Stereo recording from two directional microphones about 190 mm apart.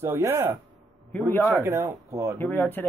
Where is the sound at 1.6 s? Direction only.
10° right (ahead or behind).